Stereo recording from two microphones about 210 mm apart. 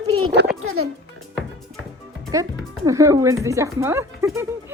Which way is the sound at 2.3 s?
15° right (ahead or behind).